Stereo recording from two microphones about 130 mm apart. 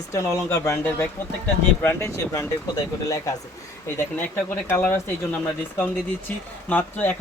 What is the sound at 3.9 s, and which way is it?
Speech, 20° left (ahead or behind).